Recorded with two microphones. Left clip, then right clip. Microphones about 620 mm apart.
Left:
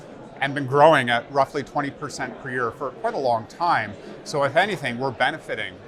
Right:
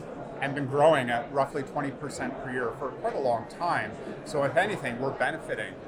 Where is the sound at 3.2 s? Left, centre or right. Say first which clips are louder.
Left 7 dB; left.